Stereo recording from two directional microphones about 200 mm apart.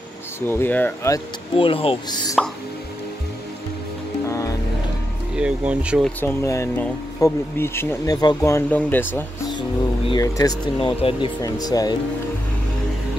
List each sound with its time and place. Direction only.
0.5 s speech: 10° left (ahead or behind)
1.6 s speech: 25° left (ahead or behind)
4.3 s music: 15° left (ahead or behind)
5.3 s speech: 5° right (ahead or behind)
6.2 s speech: 15° left (ahead or behind)
10.0 s speech: 20° left (ahead or behind)